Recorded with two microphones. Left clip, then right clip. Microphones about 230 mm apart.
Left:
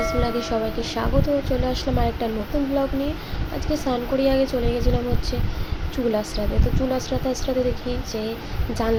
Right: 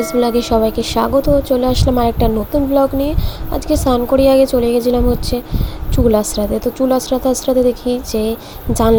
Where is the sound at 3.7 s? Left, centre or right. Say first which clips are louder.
Right 10 dB; right.